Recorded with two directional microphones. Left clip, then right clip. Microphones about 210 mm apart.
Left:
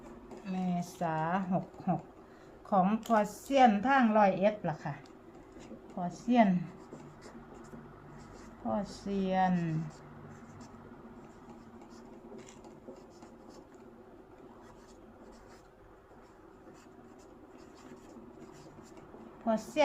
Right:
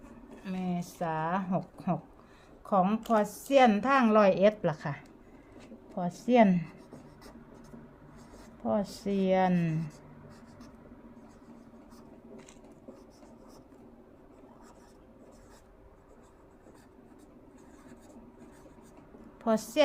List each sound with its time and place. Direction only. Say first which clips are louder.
0.4 s a woman's voice: even; 30° right (ahead or behind); by 4.9 s 55° right (ahead or behind)
6.0 s a woman's voice: right 4 dB; 50° right (ahead or behind)
8.6 s a woman's voice: right 5 dB; 50° right (ahead or behind)
19.5 s a woman's voice: right 3 dB; 45° right (ahead or behind)